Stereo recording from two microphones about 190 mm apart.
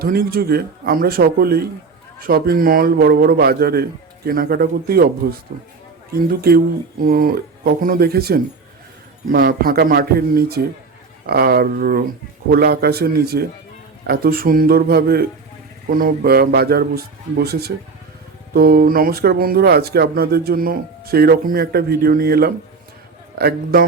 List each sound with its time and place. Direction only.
0.0 s speech: 50° right (ahead or behind)